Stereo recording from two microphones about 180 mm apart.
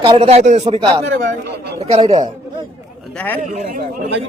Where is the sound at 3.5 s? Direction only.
40° right (ahead or behind).